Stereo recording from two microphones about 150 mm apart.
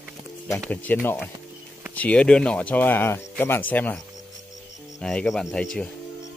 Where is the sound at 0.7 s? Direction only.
10° left (ahead or behind).